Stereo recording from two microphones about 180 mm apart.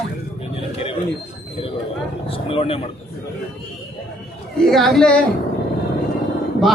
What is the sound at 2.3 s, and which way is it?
Speech, 30° left (ahead or behind).